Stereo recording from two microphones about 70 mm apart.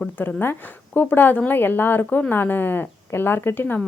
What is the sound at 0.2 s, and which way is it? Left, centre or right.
A woman's voice, left.